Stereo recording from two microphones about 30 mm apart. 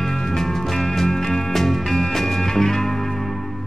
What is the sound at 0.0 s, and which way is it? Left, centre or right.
Music, centre.